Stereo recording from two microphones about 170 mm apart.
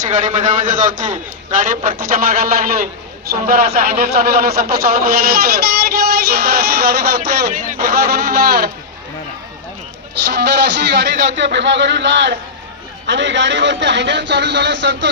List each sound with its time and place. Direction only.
0.0 s a man's voice: 50° right (ahead or behind)
6.3 s music: 70° right (ahead or behind)
7.5 s a man's voice: 45° right (ahead or behind)
7.9 s music: 70° right (ahead or behind)
10.2 s a man's voice: 85° right